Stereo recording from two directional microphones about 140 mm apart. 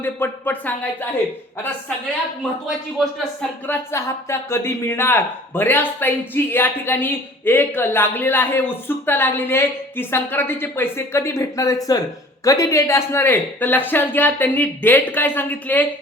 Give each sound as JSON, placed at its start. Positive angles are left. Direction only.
{"t": 0.0, "sound": "speech", "side_deg": 15}
{"t": 2.4, "sound": "speech", "side_deg": 0}
{"t": 3.7, "sound": "speech", "side_deg": 20}